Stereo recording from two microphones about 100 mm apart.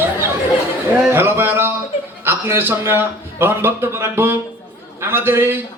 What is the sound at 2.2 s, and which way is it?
A man's voice, 25° right (ahead or behind).